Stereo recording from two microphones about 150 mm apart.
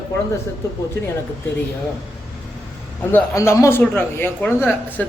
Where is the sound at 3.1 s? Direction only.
20° left (ahead or behind).